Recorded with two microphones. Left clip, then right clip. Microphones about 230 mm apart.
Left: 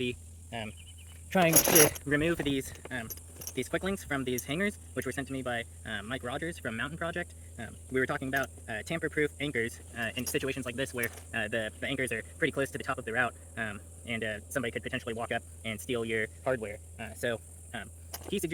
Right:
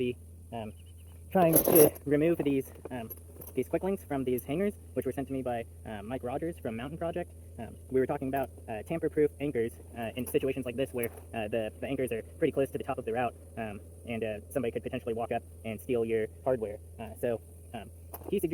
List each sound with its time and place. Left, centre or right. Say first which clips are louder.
0.0 s speech: right 2 dB; left
1.9 s speech: right 2 dB; left